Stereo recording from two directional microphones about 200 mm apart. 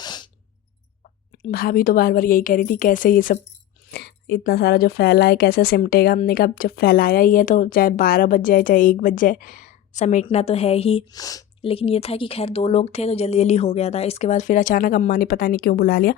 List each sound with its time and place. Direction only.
0.0 s a sound: 20° left (ahead or behind)
1.5 s speech: 45° left (ahead or behind)
3.9 s a woman's voice: 55° left (ahead or behind); by 11.7 s 20° left (ahead or behind)
11.7 s speech: 30° left (ahead or behind); by 16.1 s 45° left (ahead or behind)